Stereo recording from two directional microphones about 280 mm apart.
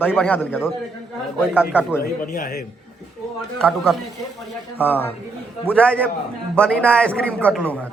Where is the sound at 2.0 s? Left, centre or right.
Left.